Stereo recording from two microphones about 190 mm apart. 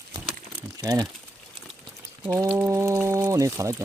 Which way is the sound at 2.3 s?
15° right (ahead or behind).